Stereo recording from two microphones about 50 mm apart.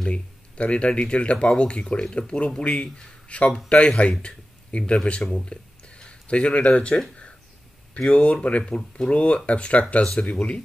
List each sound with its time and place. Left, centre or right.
0.0 s speech: left
8.0 s speech: left